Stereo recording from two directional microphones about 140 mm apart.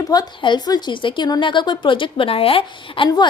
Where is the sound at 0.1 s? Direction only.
30° left (ahead or behind).